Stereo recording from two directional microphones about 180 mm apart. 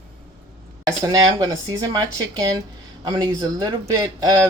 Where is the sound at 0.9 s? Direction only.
20° right (ahead or behind).